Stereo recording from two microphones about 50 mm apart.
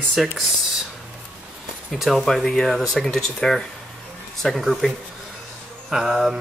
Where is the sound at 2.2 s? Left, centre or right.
Centre.